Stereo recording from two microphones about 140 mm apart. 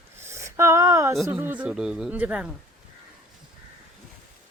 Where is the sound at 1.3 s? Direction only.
10° right (ahead or behind).